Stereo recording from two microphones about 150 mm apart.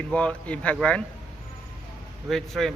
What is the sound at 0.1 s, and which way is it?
Speech, 5° left (ahead or behind).